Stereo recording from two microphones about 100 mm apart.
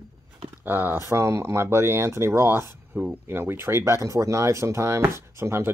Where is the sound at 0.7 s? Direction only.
20° right (ahead or behind).